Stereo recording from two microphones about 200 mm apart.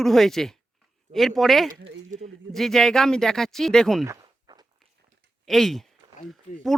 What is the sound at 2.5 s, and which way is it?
Speech, centre (ahead or behind).